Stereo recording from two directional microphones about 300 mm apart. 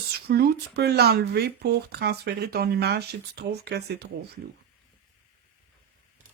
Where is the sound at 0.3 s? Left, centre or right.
Right.